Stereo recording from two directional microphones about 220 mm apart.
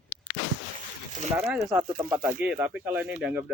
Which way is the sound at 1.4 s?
Centre (ahead or behind).